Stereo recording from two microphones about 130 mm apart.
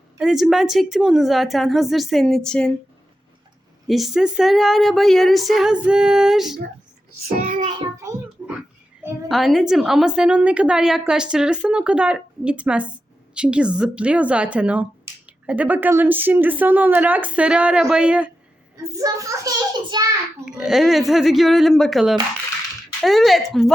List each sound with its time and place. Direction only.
0.2 s speech: 5° right (ahead or behind)
3.8 s speech: centre (ahead or behind)
7.4 s child singing: 90° right
8.4 s a sound: 5° right (ahead or behind)
9.3 s a woman's voice: centre (ahead or behind)
18.8 s a child's voice: 25° right (ahead or behind)
20.4 s speech: 5° right (ahead or behind)